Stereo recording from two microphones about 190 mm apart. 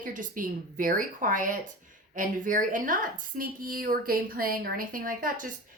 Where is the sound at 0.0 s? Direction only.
45° right (ahead or behind).